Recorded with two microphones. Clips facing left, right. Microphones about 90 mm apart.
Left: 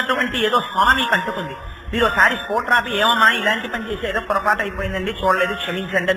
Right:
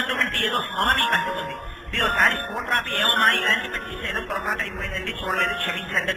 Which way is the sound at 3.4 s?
55° left (ahead or behind).